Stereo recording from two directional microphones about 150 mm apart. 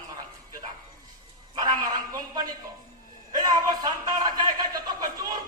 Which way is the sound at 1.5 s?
25° right (ahead or behind).